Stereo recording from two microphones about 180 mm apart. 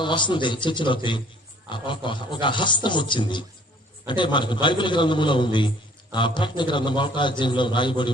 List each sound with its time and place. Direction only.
0.0 s a man's voice: 25° left (ahead or behind)